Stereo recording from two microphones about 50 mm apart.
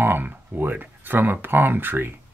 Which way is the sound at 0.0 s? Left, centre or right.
Right.